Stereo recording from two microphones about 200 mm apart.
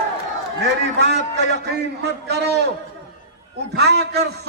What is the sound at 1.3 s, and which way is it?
A man's voice, 55° right (ahead or behind).